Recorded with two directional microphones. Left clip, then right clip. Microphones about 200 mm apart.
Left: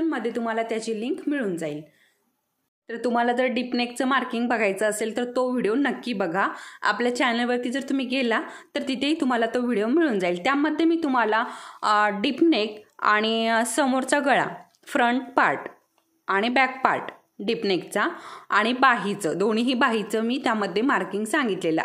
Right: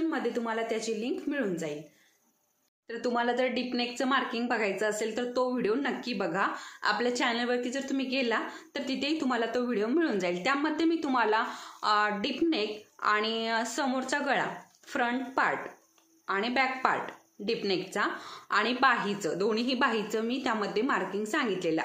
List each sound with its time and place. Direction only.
0.1 s speech: 45° left (ahead or behind)
2.9 s speech: 40° left (ahead or behind)